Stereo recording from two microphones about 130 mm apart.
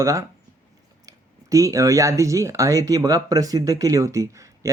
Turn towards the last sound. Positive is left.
turn(degrees=-25)  # may be behind; listen again after turning